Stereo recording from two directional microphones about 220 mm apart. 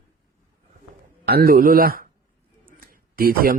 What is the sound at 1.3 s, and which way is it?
A man's voice, 40° right (ahead or behind).